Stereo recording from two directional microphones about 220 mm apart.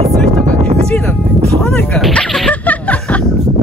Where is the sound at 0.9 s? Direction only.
5° left (ahead or behind).